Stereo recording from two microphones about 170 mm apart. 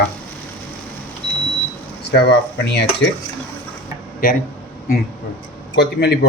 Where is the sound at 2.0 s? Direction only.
80° left.